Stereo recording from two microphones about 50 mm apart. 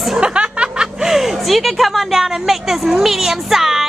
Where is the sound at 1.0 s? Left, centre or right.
Centre.